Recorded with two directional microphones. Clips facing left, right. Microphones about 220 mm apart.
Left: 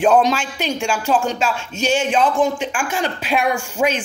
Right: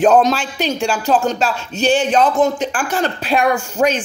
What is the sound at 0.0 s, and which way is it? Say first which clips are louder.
Speech: right 2 dB; 40° right (ahead or behind).